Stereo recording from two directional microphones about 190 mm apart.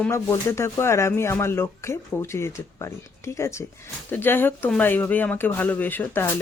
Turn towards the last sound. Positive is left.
turn(degrees=10)  # may be behind; listen again after turning